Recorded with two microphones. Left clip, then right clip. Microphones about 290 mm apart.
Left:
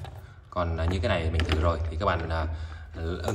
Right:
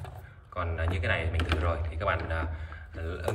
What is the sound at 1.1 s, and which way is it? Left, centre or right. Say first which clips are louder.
A man's voice: right 1 dB; centre.